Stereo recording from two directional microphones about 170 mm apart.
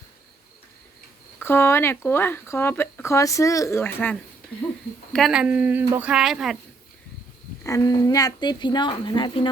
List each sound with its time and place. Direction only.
1.4 s speech: 15° left (ahead or behind)
5.1 s speech: centre (ahead or behind)
7.6 s a woman's voice: 20° left (ahead or behind)